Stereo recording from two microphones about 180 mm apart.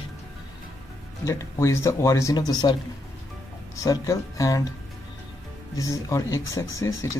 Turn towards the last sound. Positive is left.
turn(degrees=15)  # may be behind; listen again after turning